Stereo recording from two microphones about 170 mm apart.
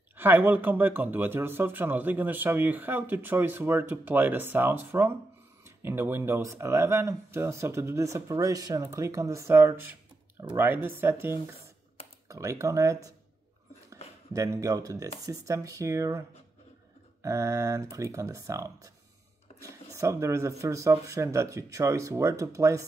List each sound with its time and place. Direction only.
0.2 s speech: 10° right (ahead or behind)
14.3 s speech: 20° right (ahead or behind)